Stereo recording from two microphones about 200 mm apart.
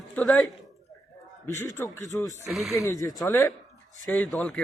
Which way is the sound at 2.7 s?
15° left (ahead or behind).